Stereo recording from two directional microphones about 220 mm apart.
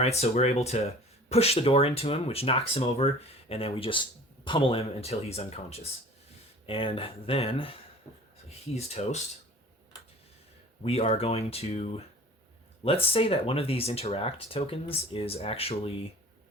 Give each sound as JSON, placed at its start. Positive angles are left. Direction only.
{"t": 0.0, "sound": "speech", "side_deg": 30}
{"t": 10.8, "sound": "speech", "side_deg": 25}